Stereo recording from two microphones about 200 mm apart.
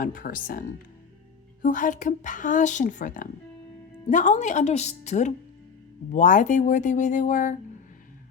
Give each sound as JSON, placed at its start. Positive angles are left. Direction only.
{"t": 0.0, "sound": "speech", "side_deg": 45}
{"t": 1.6, "sound": "speech", "side_deg": 40}